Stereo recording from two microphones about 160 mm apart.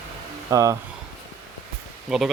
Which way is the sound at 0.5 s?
20° right (ahead or behind).